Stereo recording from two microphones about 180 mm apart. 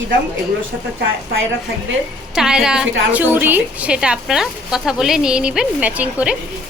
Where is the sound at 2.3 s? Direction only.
5° right (ahead or behind).